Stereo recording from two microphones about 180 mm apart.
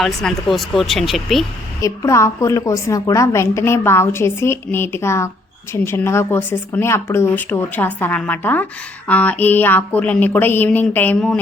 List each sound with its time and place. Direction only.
0.0 s speech: centre (ahead or behind)
1.8 s a woman's voice: 15° left (ahead or behind)